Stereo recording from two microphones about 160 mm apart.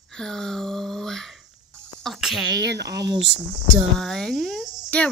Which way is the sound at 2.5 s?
90° right.